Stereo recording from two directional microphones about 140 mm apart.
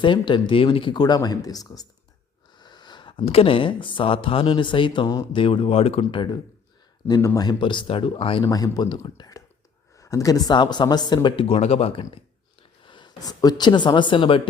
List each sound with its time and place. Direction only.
0.0 s speech: 35° left (ahead or behind)
7.1 s speech: 25° left (ahead or behind)
7.4 s speech: 35° left (ahead or behind)
8.4 s speech: 25° left (ahead or behind)